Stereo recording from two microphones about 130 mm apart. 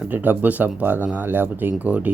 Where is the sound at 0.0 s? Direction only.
15° right (ahead or behind).